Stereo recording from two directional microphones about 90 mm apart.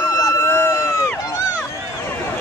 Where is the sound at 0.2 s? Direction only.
35° left (ahead or behind).